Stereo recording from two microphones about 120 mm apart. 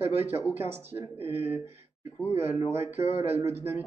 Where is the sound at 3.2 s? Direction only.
20° right (ahead or behind).